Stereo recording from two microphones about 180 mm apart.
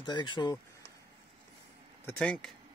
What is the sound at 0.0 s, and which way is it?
Speech, 25° left (ahead or behind).